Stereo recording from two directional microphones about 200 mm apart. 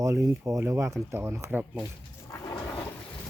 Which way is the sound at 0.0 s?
15° right (ahead or behind).